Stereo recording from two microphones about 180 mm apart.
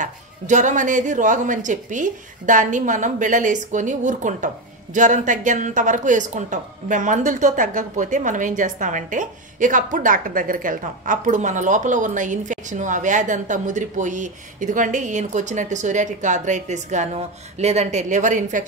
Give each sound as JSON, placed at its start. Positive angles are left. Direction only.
{"t": 0.0, "sound": "speech", "side_deg": -45}